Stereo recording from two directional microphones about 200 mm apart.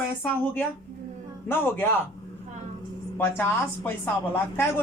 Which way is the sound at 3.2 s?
10° left (ahead or behind).